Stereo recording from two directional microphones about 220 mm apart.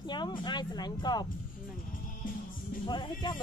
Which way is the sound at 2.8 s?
20° left (ahead or behind).